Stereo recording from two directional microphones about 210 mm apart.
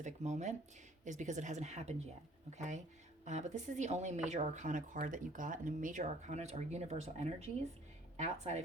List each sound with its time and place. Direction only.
0.0 s speech: 35° right (ahead or behind)